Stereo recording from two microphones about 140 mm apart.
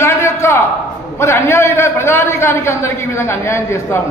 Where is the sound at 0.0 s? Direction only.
20° left (ahead or behind).